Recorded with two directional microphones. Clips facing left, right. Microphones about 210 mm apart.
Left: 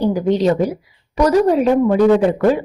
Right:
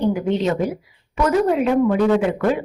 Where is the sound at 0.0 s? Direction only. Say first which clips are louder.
Left 4 dB; 35° left (ahead or behind).